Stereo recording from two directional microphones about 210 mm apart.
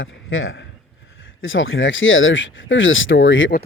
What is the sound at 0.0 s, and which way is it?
A man's voice, 70° left (ahead or behind).